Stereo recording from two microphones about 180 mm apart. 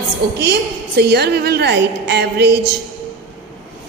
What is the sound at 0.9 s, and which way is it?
A woman's voice, 65° right (ahead or behind).